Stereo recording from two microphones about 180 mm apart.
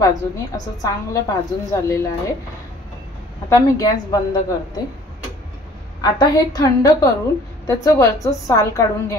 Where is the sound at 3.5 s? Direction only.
20° left (ahead or behind).